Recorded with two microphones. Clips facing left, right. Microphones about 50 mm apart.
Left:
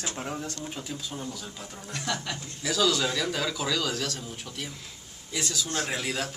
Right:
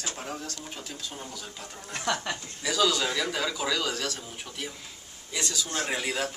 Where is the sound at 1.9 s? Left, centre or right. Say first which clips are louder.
Right 3 dB; right.